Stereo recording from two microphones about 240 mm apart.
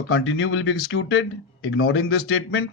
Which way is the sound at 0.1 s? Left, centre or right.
Left.